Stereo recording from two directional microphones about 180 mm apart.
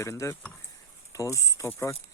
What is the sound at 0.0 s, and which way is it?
Speech, 15° left (ahead or behind).